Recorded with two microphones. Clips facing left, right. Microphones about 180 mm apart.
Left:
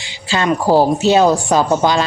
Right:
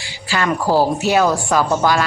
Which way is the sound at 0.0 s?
20° left (ahead or behind).